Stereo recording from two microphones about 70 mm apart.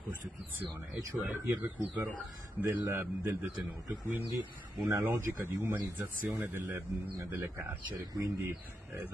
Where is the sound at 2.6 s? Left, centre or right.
Right.